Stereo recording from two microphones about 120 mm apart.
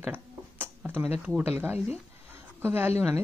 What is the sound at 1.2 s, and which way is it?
A woman's voice, 15° right (ahead or behind).